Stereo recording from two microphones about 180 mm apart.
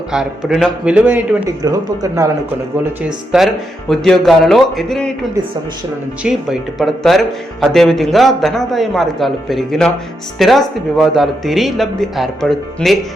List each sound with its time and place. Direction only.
0.1 s a man's voice: centre (ahead or behind)
1.5 s speech: 20° right (ahead or behind)
3.3 s speech: centre (ahead or behind)